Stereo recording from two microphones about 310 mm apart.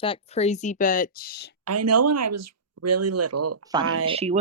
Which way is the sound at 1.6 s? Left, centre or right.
Right.